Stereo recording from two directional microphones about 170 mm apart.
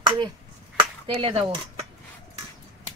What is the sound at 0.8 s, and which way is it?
Speech, 30° right (ahead or behind).